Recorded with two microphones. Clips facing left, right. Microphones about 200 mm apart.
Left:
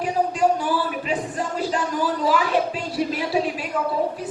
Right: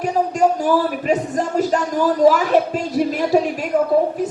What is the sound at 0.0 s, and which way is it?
Speech, 45° right (ahead or behind).